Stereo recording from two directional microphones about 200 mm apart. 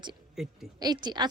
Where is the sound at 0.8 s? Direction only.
20° right (ahead or behind).